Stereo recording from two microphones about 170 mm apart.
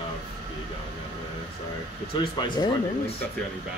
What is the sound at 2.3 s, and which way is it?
Speech, 25° left (ahead or behind).